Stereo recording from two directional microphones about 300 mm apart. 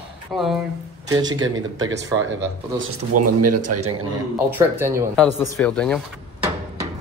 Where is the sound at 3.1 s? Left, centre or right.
Right.